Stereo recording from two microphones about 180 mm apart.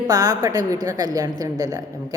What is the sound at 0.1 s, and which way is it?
A man's voice, 20° right (ahead or behind).